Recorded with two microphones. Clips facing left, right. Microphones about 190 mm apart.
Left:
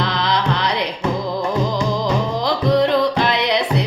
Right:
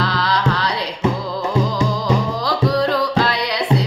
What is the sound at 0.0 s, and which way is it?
Music, 20° left (ahead or behind).